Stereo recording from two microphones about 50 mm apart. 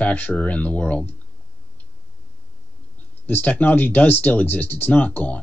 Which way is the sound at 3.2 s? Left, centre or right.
Left.